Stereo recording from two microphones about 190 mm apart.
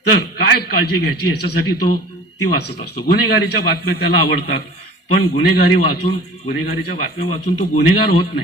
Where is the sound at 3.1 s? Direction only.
60° left (ahead or behind).